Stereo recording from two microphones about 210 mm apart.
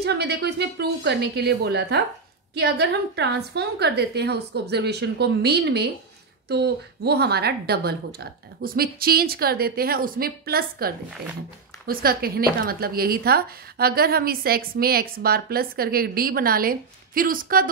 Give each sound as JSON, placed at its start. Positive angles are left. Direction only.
{"t": 0.0, "sound": "a woman's voice", "side_deg": -50}
{"t": 11.9, "sound": "a woman's voice", "side_deg": -45}